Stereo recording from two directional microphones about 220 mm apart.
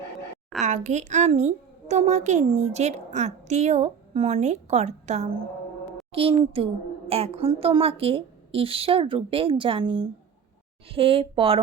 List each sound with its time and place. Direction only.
0.6 s a woman's voice: 35° right (ahead or behind)